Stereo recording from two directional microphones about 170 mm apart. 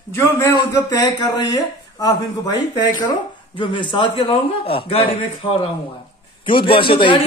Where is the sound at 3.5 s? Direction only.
30° left (ahead or behind).